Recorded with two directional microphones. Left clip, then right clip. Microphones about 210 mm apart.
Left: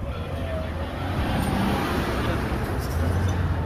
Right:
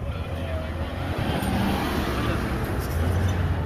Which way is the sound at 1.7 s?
50° right (ahead or behind).